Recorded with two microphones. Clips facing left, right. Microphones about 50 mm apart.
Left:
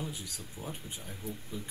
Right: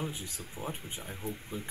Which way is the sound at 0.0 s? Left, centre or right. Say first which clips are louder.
Right 2 dB; right.